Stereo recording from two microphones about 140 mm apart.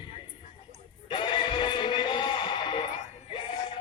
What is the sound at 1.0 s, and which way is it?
Music, 35° left (ahead or behind).